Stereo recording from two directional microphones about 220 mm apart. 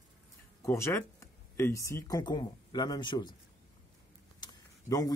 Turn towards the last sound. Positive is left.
turn(degrees=15)  # may be behind; listen again after turning